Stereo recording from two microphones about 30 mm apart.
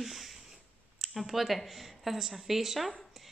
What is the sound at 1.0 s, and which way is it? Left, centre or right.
Speech, centre.